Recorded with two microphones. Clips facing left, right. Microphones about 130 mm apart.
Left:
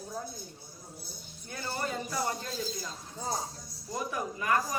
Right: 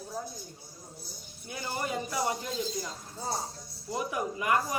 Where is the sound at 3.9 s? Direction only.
15° right (ahead or behind).